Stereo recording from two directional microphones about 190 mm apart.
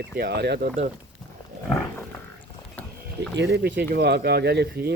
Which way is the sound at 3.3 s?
60° right (ahead or behind).